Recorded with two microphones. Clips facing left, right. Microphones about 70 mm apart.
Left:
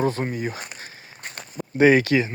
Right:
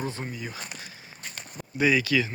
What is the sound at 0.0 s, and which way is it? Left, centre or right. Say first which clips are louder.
Speech: left 10 dB; left.